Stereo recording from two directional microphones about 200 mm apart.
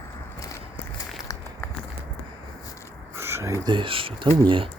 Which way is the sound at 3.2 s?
10° right (ahead or behind).